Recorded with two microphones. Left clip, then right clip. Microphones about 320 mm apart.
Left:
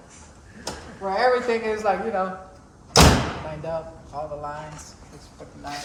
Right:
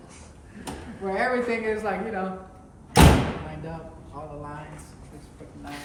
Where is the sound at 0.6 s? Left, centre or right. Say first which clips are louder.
Left 3 dB; centre.